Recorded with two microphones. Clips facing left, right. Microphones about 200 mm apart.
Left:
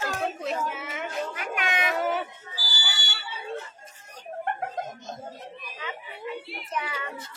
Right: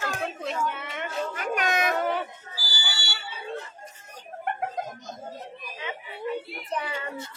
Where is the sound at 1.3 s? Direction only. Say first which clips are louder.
Right 3 dB; 40° right (ahead or behind).